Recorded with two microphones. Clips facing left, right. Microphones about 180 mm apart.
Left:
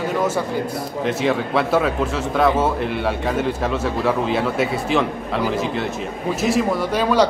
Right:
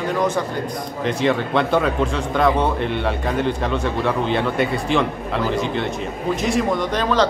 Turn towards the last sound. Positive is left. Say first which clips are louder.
# left 2 dB
turn(degrees=10)  # may be behind; listen again after turning